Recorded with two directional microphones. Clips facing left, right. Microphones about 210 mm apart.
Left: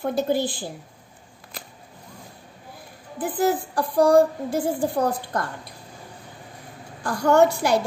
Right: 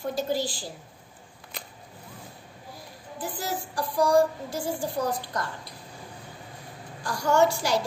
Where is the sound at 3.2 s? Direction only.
55° left (ahead or behind).